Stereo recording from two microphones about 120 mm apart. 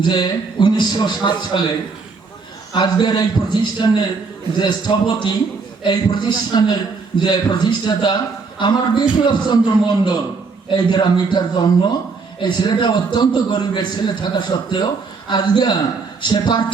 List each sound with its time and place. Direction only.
0.0 s a man's voice: 40° left (ahead or behind)
2.7 s a man's voice: 35° left (ahead or behind)